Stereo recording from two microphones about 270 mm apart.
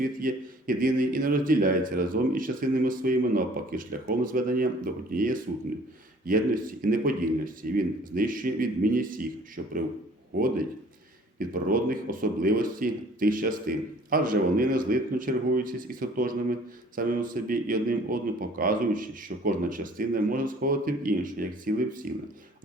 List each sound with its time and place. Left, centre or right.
0.0 s speech: right
11.3 s speech: right